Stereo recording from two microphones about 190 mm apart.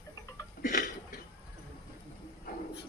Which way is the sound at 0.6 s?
45° left (ahead or behind).